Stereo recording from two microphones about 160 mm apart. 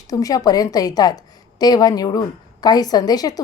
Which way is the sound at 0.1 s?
20° left (ahead or behind).